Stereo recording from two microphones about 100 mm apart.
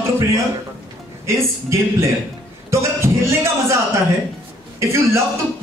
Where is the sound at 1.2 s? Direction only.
30° right (ahead or behind).